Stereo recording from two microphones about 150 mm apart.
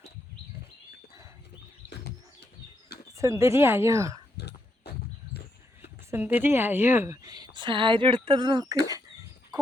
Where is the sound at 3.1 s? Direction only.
20° right (ahead or behind).